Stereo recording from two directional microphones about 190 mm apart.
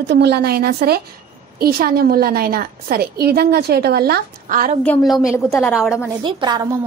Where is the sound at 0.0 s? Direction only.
65° right (ahead or behind); by 4.7 s 45° right (ahead or behind).